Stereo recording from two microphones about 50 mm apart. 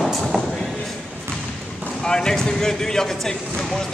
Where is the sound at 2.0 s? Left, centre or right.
Centre.